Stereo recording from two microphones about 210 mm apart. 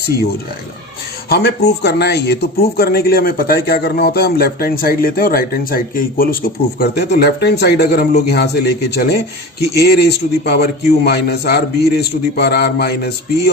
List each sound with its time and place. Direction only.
1.3 s speech: 50° left (ahead or behind)